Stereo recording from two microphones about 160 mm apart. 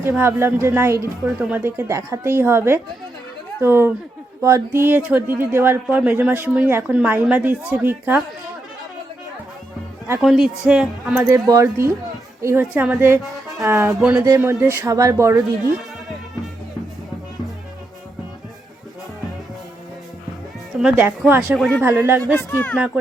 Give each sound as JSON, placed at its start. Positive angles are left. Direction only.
{"t": 0.2, "sound": "speech", "side_deg": -15}
{"t": 10.2, "sound": "speech", "side_deg": 0}
{"t": 11.3, "sound": "speech", "side_deg": -20}
{"t": 14.0, "sound": "speech", "side_deg": -5}
{"t": 14.3, "sound": "speech", "side_deg": -15}
{"t": 20.7, "sound": "music", "side_deg": -5}
{"t": 21.2, "sound": "speech", "side_deg": -10}
{"t": 21.6, "sound": "speech", "side_deg": 0}
{"t": 21.8, "sound": "speech", "side_deg": -15}
{"t": 22.3, "sound": "speech", "side_deg": 15}